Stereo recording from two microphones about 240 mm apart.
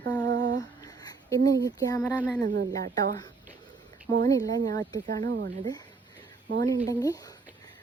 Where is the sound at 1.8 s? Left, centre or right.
Centre.